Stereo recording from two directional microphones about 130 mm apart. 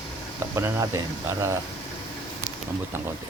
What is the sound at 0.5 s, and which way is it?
Speech, 25° right (ahead or behind).